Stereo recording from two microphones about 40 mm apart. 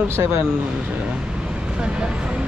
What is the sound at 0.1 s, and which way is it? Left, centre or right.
Speech, right.